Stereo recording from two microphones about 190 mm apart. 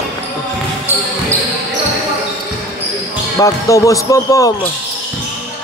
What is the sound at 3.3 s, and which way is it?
Speech, 15° left (ahead or behind).